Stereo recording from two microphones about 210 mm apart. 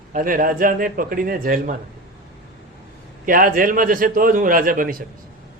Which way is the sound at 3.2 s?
40° right (ahead or behind).